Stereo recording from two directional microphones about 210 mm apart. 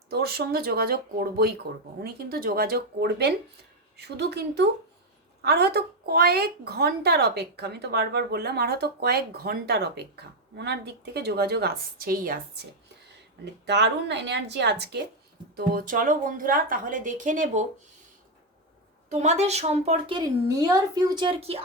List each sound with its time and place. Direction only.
0.1 s a woman's voice: 50° right (ahead or behind)
13.4 s speech: 55° right (ahead or behind)
15.5 s speech: 40° right (ahead or behind)
19.2 s a woman's voice: 30° right (ahead or behind)